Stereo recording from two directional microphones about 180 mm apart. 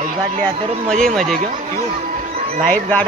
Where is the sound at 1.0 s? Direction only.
5° left (ahead or behind).